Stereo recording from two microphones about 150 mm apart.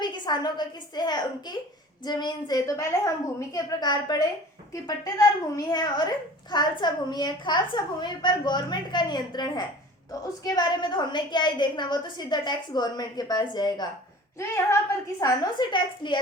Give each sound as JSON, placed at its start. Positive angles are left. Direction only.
{"t": 0.0, "sound": "a woman's voice", "side_deg": 30}